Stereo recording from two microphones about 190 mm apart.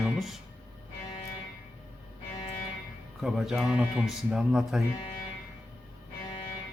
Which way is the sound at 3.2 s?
Centre (ahead or behind).